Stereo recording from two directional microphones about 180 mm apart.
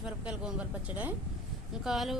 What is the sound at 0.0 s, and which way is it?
Speech, 5° right (ahead or behind).